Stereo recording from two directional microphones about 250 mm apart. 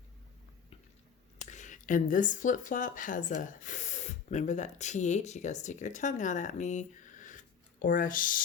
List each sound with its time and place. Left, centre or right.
1.4 s speech: left